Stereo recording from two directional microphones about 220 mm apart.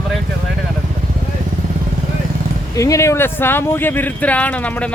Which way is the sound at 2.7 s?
15° left (ahead or behind).